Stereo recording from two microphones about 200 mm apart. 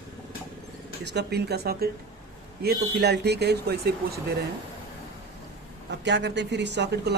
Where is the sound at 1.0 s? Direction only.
55° right (ahead or behind).